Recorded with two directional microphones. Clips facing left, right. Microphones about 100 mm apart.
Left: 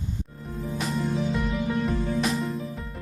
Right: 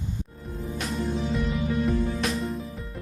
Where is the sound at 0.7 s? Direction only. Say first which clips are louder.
Left 3 dB; centre (ahead or behind).